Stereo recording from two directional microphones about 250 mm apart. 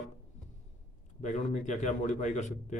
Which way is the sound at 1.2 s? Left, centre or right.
Left.